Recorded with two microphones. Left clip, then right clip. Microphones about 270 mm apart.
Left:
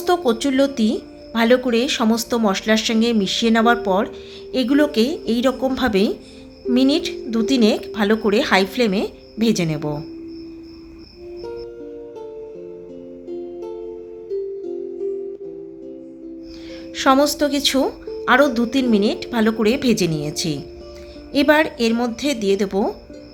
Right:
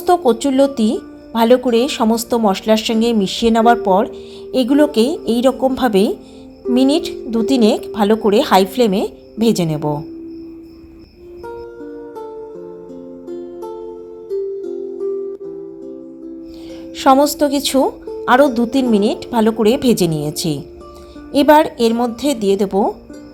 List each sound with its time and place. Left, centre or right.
0.0 s speech: centre
13.2 s music: centre
16.9 s speech: centre